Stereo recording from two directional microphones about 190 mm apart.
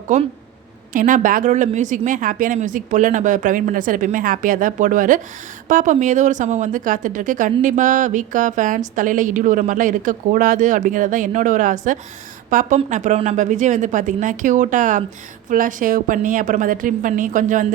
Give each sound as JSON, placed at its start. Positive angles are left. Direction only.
{"t": 0.1, "sound": "a woman's voice", "side_deg": -40}